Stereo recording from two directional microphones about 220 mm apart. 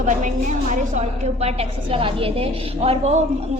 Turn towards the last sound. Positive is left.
turn(degrees=-30)  # may be behind; listen again after turning